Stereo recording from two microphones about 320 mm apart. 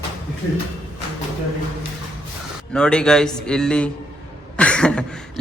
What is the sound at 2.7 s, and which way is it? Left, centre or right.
A man's voice, centre.